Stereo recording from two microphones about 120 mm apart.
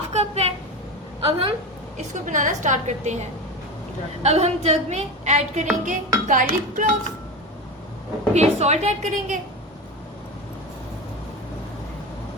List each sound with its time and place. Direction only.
0.1 s a sound: 60° right (ahead or behind)
1.2 s a woman's voice: 50° right (ahead or behind)
2.0 s a woman's voice: 90° right
4.2 s a woman's voice: 60° right (ahead or behind)
5.8 s a woman's voice: 90° right
8.3 s a woman's voice: 65° right (ahead or behind); by 9.4 s 85° right